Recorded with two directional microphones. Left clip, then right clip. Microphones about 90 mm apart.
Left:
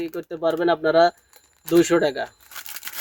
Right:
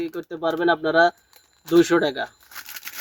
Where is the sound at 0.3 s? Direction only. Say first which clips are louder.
Even; 5° left (ahead or behind).